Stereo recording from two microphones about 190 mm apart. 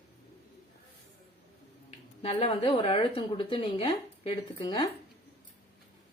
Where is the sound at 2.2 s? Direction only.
30° left (ahead or behind).